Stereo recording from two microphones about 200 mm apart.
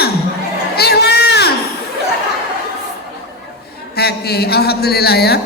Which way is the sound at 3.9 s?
50° left (ahead or behind).